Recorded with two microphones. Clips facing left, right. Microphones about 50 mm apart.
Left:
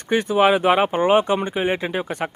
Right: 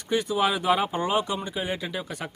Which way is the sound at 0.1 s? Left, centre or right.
Left.